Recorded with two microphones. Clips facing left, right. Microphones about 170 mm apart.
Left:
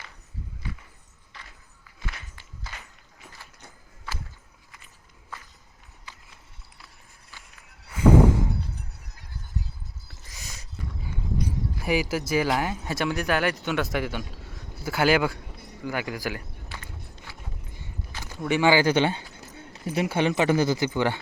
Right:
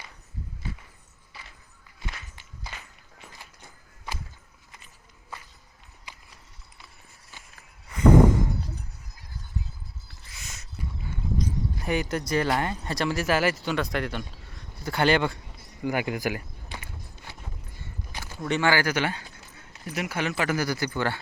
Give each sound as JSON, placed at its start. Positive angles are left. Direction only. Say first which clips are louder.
{"t": 1.3, "sound": "a sound", "louder": "even", "side_deg": -5}
{"t": 2.3, "sound": "walk", "louder": "right 1 dB", "side_deg": -20}
{"t": 6.1, "sound": "clip-clop", "louder": "even", "side_deg": -15}
{"t": 7.9, "sound": "a sound", "louder": "even", "side_deg": 5}
{"t": 10.2, "sound": "a sound", "louder": "left 1 dB", "side_deg": 35}
{"t": 11.8, "sound": "speech", "louder": "left 3 dB", "side_deg": 5}
{"t": 15.8, "sound": "speech", "louder": "right 3 dB", "side_deg": -15}
{"t": 16.0, "sound": "walk", "louder": "right 3 dB", "side_deg": -20}
{"t": 18.4, "sound": "speech", "louder": "left 4 dB", "side_deg": 10}